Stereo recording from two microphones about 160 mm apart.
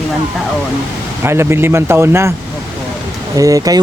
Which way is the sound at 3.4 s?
20° right (ahead or behind).